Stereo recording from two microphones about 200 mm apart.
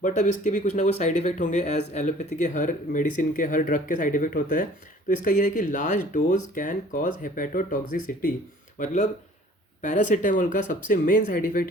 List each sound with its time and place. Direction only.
0.0 s speech: 35° left (ahead or behind)